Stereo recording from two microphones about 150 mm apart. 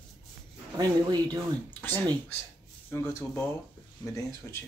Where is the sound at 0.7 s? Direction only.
25° right (ahead or behind).